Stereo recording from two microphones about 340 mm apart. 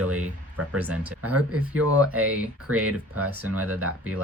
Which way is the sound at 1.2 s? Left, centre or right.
Right.